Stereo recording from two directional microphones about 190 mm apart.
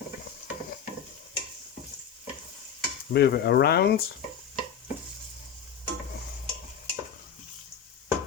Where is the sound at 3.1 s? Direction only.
55° left (ahead or behind).